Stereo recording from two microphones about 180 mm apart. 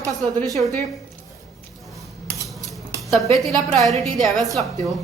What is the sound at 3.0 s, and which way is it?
A woman's voice, centre (ahead or behind).